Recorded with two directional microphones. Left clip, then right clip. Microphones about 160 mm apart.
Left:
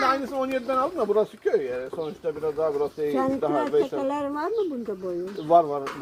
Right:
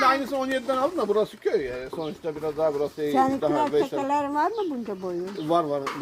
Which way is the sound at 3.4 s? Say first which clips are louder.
Even; 25° right (ahead or behind).